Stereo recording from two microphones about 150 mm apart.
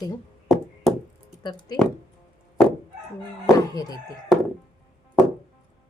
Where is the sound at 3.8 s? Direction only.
25° left (ahead or behind).